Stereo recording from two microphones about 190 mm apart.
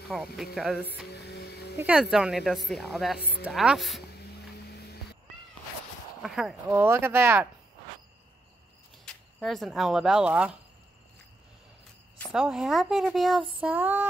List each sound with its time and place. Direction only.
0.1 s speech: centre (ahead or behind)
1.0 s music: 60° left (ahead or behind)
1.8 s speech: 5° right (ahead or behind)
3.2 s speech: 60° left (ahead or behind)
3.4 s speech: centre (ahead or behind)
4.2 s vehicle: 60° left (ahead or behind)
6.2 s speech: centre (ahead or behind)
9.0 s speech: centre (ahead or behind)
12.2 s speech: centre (ahead or behind)